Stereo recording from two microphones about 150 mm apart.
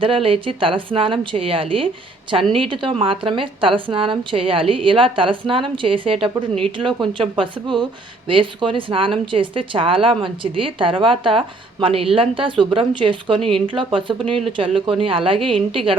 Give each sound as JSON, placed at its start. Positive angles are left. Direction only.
{"t": 0.0, "sound": "speech", "side_deg": -35}